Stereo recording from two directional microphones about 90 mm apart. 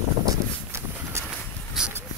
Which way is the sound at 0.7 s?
30° right (ahead or behind).